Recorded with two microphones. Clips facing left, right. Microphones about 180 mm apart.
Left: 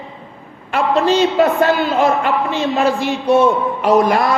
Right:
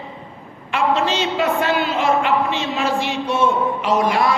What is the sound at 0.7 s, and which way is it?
A man's voice, 40° left (ahead or behind).